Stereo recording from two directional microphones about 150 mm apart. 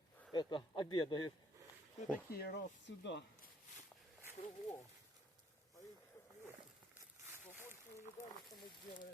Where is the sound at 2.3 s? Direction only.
90° left.